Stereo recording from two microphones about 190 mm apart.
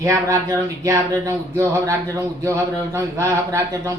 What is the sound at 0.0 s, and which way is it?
Speech, 15° right (ahead or behind).